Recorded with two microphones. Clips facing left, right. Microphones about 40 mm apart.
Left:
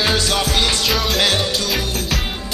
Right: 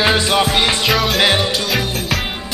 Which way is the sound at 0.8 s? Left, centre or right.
Centre.